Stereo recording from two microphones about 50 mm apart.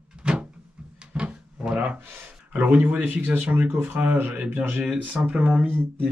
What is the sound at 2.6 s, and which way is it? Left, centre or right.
Speech, right.